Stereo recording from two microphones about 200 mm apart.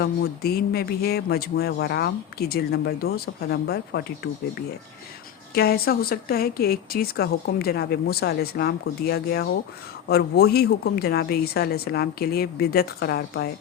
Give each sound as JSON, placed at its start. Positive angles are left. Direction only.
{"t": 0.0, "sound": "a man's voice", "side_deg": 50}
{"t": 5.5, "sound": "a man's voice", "side_deg": 50}